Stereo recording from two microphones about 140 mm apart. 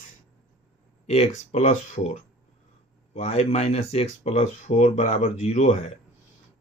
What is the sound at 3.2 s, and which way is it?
Speech, 50° left (ahead or behind).